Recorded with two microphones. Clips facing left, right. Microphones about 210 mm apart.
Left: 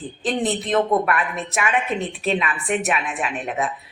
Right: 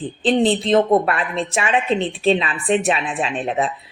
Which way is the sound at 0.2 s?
30° right (ahead or behind).